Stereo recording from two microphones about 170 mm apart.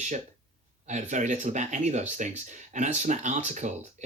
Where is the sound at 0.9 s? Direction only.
45° right (ahead or behind).